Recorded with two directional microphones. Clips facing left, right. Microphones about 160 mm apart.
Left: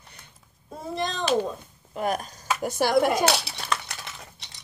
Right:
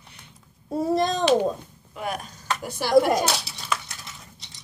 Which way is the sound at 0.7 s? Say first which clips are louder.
Right 8 dB; 40° right (ahead or behind).